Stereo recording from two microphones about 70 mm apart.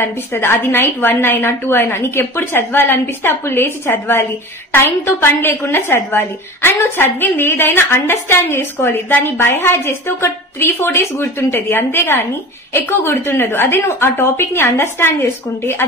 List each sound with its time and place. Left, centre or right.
0.0 s a woman's voice: left